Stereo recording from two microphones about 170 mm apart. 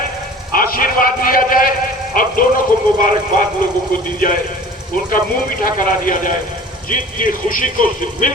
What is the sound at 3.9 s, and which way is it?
Speech, 55° left (ahead or behind).